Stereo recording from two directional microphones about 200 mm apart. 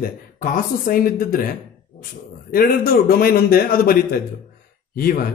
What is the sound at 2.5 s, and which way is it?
Speech, 45° left (ahead or behind).